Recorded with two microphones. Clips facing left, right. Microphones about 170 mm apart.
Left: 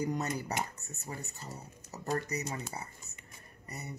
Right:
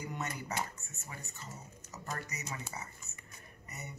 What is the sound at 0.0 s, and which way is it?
Speech, 40° left (ahead or behind).